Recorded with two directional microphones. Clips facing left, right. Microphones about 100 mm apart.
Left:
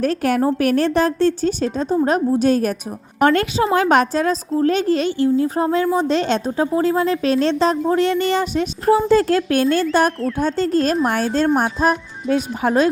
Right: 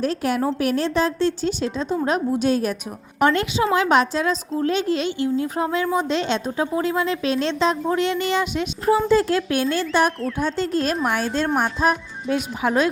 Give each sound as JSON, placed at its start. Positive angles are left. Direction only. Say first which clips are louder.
{"t": 0.0, "sound": "a woman's voice", "louder": "left 4 dB", "side_deg": 55}
{"t": 10.2, "sound": "speech", "louder": "left 4 dB", "side_deg": 0}
{"t": 10.4, "sound": "a woman's voice", "louder": "left 4 dB", "side_deg": 40}